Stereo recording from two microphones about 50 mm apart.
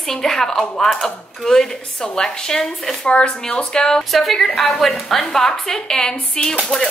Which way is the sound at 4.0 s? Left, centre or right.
Centre.